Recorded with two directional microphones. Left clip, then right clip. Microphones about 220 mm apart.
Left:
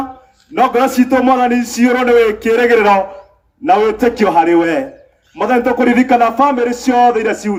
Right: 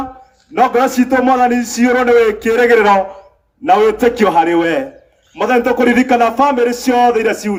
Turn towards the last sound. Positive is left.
turn(degrees=-50)  # may be behind; listen again after turning